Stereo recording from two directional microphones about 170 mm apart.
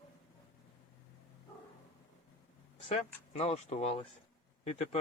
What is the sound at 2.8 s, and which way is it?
Speech, 40° left (ahead or behind).